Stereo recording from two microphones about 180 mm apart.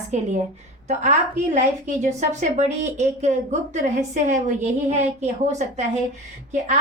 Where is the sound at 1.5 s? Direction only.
40° right (ahead or behind).